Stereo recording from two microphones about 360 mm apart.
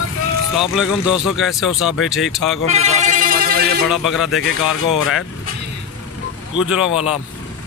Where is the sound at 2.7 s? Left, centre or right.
Centre.